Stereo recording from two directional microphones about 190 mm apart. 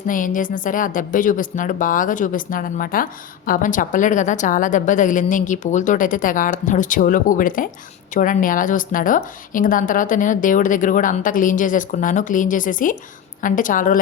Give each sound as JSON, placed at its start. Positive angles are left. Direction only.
{"t": 0.1, "sound": "a woman's voice", "side_deg": 45}